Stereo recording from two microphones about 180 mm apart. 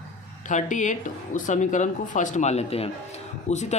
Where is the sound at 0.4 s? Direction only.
45° left (ahead or behind).